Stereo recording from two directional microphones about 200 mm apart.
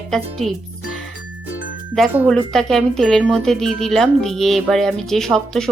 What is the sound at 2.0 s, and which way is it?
Speech, centre (ahead or behind).